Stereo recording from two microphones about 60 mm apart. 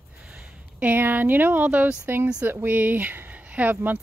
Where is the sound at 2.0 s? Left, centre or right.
Right.